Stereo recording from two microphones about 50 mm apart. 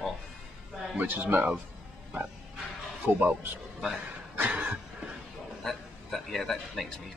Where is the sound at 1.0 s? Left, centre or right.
Right.